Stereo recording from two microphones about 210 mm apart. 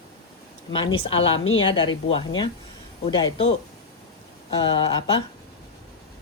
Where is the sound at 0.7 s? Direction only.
25° left (ahead or behind).